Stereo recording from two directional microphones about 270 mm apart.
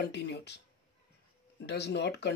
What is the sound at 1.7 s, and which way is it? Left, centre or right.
Speech, left.